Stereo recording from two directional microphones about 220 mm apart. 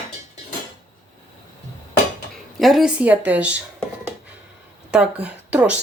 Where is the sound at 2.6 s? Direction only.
Centre (ahead or behind).